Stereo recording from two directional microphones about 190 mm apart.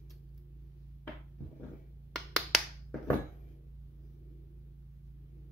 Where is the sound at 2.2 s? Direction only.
Centre (ahead or behind).